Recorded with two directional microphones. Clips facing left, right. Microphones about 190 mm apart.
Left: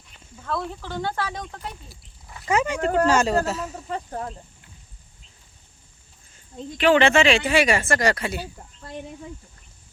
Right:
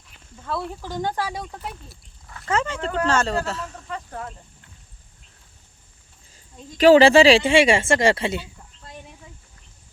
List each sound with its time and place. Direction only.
0.4 s speech: 5° right (ahead or behind)
1.7 s a sound: 5° left (ahead or behind)
2.3 s speech: 15° left (ahead or behind)
3.8 s speech: 35° left (ahead or behind)
6.7 s speech: 35° right (ahead or behind)